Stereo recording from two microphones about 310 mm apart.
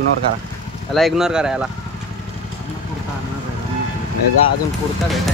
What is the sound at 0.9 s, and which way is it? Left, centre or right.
Speech, centre.